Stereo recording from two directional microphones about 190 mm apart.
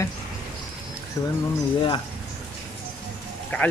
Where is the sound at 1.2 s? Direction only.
15° left (ahead or behind).